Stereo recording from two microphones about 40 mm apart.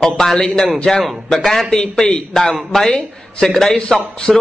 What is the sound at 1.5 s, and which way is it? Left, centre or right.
A man's voice, centre.